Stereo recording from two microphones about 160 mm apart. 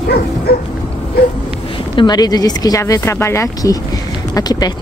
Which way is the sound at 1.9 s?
25° left (ahead or behind).